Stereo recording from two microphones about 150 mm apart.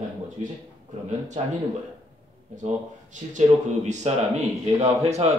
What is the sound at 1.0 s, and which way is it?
Speech, 55° right (ahead or behind).